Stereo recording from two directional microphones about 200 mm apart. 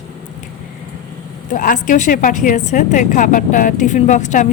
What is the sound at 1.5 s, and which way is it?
Speech, 40° left (ahead or behind).